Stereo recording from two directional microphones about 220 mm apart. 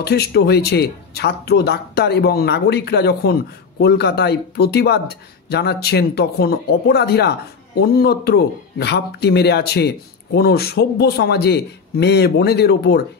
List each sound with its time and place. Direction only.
0.0 s speech: 45° left (ahead or behind)